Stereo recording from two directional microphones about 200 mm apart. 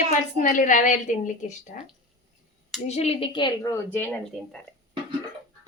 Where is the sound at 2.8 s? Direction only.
35° left (ahead or behind); by 4.6 s 5° left (ahead or behind).